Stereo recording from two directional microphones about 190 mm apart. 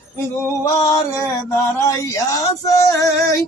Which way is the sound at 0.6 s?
15° left (ahead or behind).